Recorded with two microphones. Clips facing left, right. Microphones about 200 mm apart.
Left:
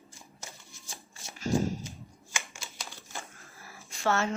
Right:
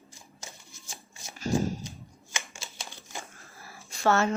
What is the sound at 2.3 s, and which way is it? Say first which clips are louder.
Typing: right 1 dB; 20° right (ahead or behind).